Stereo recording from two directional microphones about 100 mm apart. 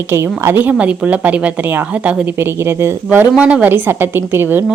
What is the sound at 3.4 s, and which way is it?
A woman's voice, 15° right (ahead or behind).